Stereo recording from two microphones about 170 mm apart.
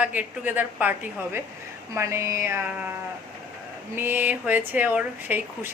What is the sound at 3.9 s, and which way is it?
Speech, 10° right (ahead or behind).